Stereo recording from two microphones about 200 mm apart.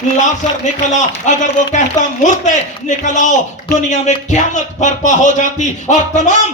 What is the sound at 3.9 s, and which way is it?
Speech, 35° left (ahead or behind).